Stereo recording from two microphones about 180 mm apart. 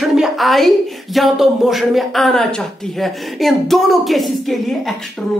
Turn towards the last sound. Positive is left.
turn(degrees=0)  # may be behind; listen again after turning